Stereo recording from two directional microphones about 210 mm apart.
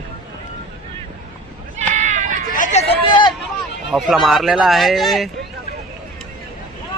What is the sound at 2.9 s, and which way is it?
Hubbub, 25° left (ahead or behind).